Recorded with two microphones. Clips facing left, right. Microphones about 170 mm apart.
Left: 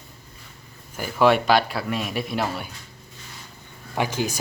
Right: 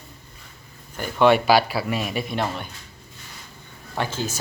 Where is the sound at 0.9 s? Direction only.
5° left (ahead or behind).